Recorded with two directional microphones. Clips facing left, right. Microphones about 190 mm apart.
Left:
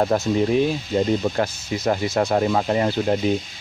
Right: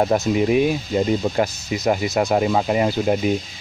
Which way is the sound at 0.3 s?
10° right (ahead or behind).